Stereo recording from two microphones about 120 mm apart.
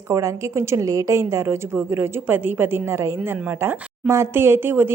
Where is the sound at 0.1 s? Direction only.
25° right (ahead or behind).